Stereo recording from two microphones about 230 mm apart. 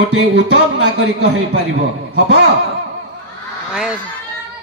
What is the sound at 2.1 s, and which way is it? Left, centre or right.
Speech, right.